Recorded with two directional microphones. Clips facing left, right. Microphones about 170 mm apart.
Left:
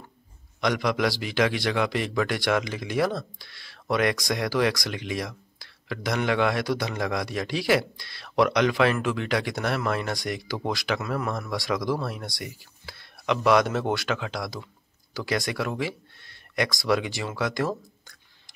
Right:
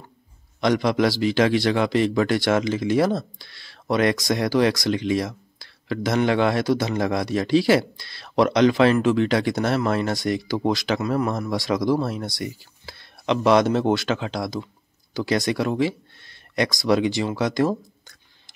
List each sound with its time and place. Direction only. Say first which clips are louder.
0.6 s speech: right 5 dB; 30° right (ahead or behind)